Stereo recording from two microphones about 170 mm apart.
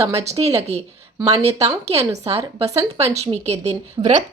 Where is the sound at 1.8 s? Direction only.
35° right (ahead or behind).